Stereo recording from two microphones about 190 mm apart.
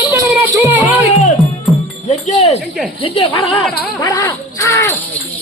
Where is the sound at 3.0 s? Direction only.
30° left (ahead or behind).